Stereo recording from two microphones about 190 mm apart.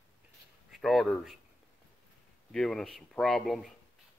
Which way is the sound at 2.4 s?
5° left (ahead or behind).